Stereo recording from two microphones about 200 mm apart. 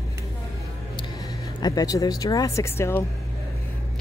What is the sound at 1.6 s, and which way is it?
A woman's voice, 20° left (ahead or behind).